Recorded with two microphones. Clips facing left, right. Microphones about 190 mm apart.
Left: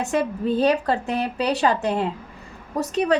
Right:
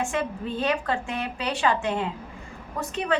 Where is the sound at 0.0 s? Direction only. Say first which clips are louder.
Left 5 dB; 40° left (ahead or behind).